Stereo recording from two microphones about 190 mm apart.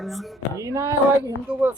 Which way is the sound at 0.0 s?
Centre (ahead or behind).